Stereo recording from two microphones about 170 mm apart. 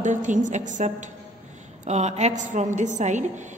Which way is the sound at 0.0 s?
45° right (ahead or behind).